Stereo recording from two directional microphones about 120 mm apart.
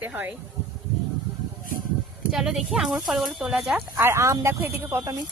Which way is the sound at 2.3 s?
Centre (ahead or behind).